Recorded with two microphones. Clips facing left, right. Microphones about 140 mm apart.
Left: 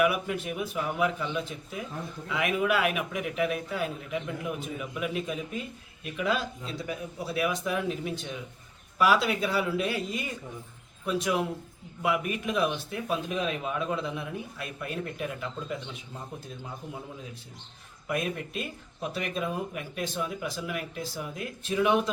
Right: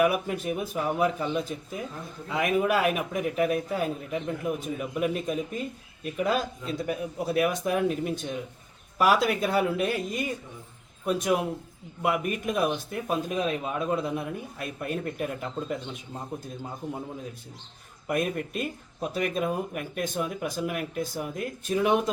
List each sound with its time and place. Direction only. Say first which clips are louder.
0.0 s a man's voice: right 2 dB; 40° right (ahead or behind)
18.1 s a man's voice: right 3 dB; 45° right (ahead or behind)